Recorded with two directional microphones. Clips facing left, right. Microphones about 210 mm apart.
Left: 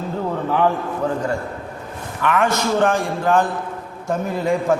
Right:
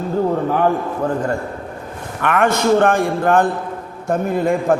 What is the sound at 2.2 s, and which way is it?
A man's voice, 55° right (ahead or behind).